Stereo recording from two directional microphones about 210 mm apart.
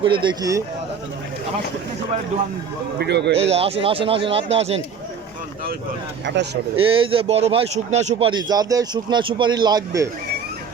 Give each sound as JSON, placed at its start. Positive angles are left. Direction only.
{"t": 0.0, "sound": "speech", "side_deg": -25}
{"t": 3.0, "sound": "a man's voice", "side_deg": -55}
{"t": 3.3, "sound": "speech", "side_deg": -30}
{"t": 6.2, "sound": "a man's voice", "side_deg": -55}
{"t": 6.7, "sound": "speech", "side_deg": -25}